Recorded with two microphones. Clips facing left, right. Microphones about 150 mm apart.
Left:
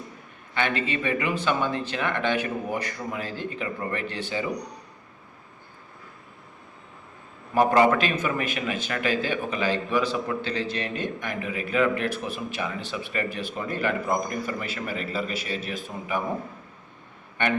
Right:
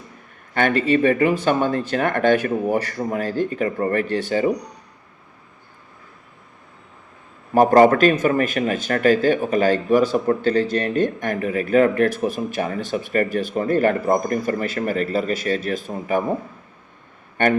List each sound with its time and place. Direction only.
0.5 s a man's voice: 45° right (ahead or behind)
7.5 s a man's voice: 45° right (ahead or behind)
17.4 s a man's voice: 45° right (ahead or behind)